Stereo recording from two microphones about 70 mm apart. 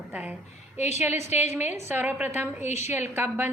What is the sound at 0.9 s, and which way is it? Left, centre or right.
A woman's voice, right.